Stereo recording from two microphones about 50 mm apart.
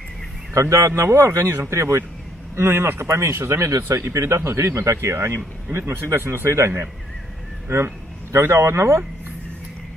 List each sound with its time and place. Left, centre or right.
0.6 s speech: right
2.5 s a man's voice: right
3.5 s a man's voice: right